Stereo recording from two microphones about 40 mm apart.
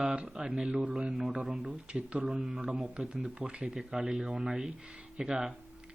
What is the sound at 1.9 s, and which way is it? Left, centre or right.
Speech, right.